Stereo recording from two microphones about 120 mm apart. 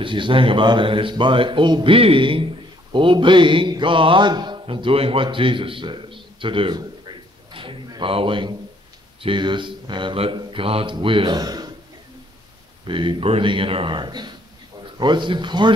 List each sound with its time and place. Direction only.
0.0 s speech: 45° right (ahead or behind)
12.8 s speech: 45° right (ahead or behind)